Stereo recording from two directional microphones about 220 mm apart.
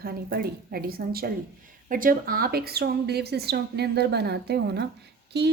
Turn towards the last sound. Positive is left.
turn(degrees=-50)  # may be behind; listen again after turning